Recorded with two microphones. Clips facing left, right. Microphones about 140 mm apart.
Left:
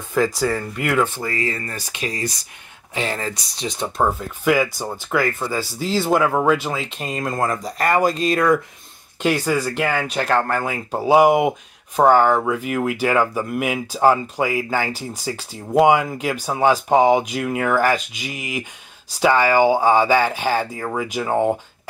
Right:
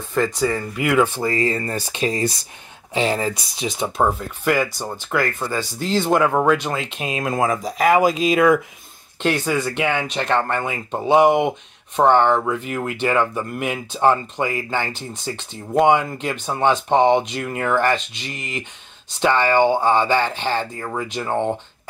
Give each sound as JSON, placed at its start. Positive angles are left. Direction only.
{"t": 0.1, "sound": "speech", "side_deg": 5}
{"t": 1.2, "sound": "speech", "side_deg": -30}